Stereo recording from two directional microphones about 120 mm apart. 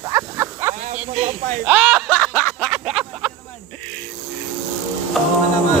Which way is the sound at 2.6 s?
Centre (ahead or behind).